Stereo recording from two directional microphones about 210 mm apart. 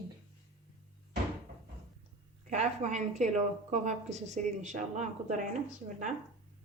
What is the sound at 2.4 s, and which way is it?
A woman's voice, 35° right (ahead or behind).